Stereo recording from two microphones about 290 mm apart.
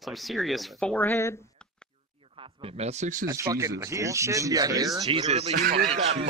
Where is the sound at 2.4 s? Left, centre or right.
Centre.